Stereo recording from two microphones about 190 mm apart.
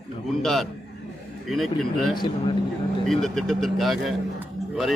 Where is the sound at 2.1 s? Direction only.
25° left (ahead or behind).